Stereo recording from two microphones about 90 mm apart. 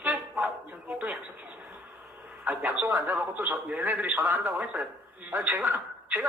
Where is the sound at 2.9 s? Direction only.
20° right (ahead or behind).